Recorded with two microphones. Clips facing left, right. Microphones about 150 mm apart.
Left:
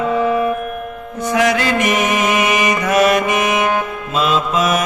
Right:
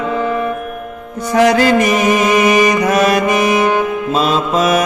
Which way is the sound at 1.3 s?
35° right (ahead or behind).